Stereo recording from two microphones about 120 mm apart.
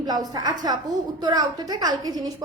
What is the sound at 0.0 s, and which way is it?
A woman's voice, 35° right (ahead or behind).